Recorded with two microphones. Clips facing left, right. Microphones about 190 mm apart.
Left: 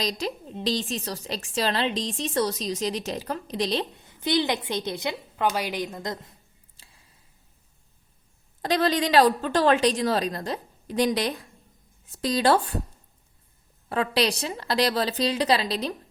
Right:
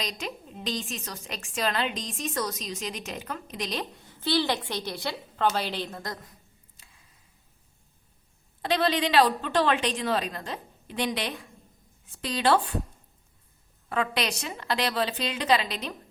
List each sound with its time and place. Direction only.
0.0 s a woman's voice: 35° left (ahead or behind); by 6.1 s 15° left (ahead or behind)
6.8 s a sound: 30° left (ahead or behind)
8.6 s a woman's voice: 40° left (ahead or behind)
13.9 s a woman's voice: 35° left (ahead or behind)